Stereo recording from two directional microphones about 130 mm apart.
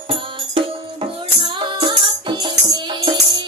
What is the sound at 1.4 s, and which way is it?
Music, 40° right (ahead or behind).